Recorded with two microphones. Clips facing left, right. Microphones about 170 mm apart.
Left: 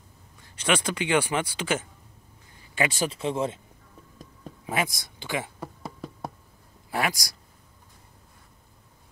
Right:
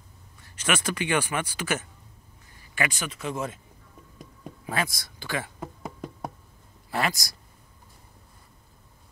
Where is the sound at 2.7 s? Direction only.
30° left (ahead or behind).